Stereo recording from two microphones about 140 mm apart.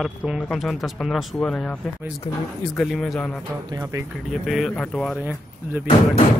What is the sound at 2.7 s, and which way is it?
Speech, centre (ahead or behind).